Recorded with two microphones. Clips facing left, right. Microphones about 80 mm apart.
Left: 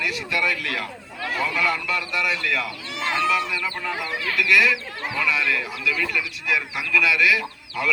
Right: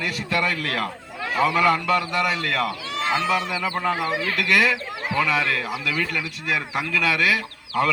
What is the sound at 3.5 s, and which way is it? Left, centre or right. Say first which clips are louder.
Speech: right 3 dB; right.